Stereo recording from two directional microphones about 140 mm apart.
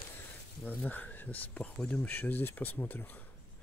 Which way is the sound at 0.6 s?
10° left (ahead or behind).